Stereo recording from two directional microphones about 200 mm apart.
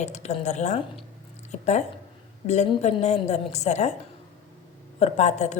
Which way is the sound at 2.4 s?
35° left (ahead or behind).